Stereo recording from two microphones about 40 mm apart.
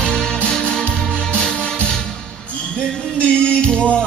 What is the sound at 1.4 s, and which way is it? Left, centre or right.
Music, centre.